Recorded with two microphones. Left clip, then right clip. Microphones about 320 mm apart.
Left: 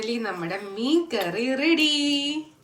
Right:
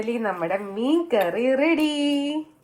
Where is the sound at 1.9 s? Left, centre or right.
Right.